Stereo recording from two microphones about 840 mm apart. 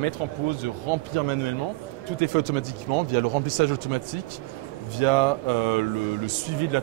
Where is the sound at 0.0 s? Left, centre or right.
Right.